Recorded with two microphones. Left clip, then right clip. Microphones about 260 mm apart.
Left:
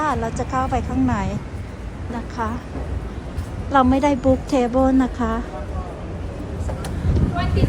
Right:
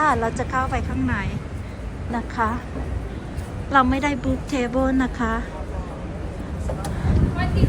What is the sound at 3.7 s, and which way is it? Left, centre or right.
Speech, centre.